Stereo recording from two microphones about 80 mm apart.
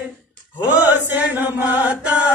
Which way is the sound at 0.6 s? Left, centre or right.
Right.